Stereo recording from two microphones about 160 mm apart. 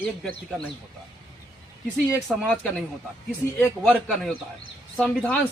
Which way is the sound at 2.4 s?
10° left (ahead or behind).